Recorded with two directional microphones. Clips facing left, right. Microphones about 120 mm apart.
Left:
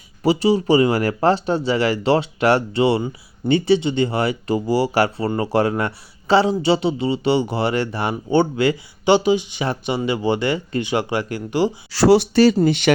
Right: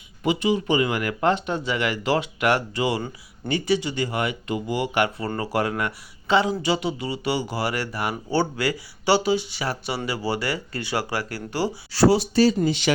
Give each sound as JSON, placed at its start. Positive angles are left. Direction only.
{"t": 0.2, "sound": "speech", "side_deg": 35}
{"t": 11.9, "sound": "speech", "side_deg": 85}